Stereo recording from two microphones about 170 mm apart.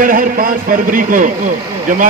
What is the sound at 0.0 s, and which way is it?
A man's voice, 55° right (ahead or behind).